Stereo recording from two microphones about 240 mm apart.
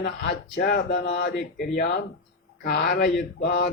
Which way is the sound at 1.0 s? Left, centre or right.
Left.